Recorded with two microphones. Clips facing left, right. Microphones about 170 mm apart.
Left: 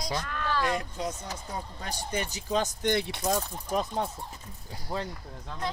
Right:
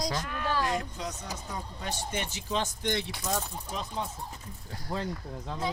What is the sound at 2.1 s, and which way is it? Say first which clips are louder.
Speech: left 5 dB; 40° left (ahead or behind).